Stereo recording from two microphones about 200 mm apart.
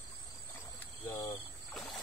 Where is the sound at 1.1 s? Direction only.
15° left (ahead or behind).